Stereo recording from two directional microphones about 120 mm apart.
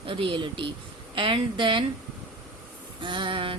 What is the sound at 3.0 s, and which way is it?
Speech, 45° right (ahead or behind).